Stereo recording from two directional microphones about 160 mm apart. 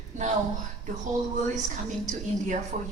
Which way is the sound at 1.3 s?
50° right (ahead or behind).